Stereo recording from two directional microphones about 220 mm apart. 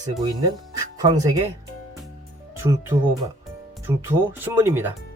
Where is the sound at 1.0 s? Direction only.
15° right (ahead or behind).